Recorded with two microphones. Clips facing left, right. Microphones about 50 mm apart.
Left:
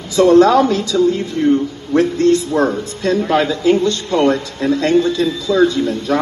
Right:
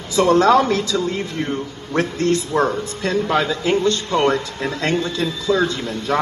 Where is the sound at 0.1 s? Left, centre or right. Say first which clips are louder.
Left 4 dB; right.